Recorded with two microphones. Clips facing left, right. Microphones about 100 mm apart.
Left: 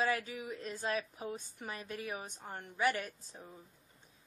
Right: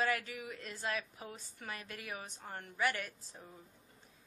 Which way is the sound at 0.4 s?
30° left (ahead or behind).